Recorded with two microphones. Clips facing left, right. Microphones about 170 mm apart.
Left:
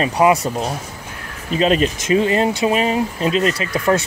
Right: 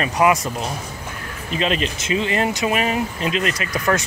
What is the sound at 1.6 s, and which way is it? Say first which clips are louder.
Speech: left 6 dB; 40° left (ahead or behind).